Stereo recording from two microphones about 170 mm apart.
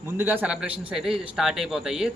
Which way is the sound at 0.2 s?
10° right (ahead or behind).